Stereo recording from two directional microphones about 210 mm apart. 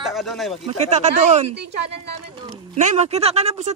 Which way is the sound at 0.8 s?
35° right (ahead or behind).